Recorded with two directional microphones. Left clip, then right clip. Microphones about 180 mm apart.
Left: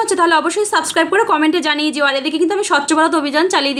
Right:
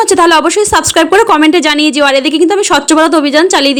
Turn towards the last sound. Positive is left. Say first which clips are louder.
# right 7 dB
turn(degrees=-35)  # may be behind; listen again after turning